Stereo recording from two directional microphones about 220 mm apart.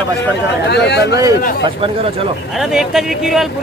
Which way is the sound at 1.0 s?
15° right (ahead or behind).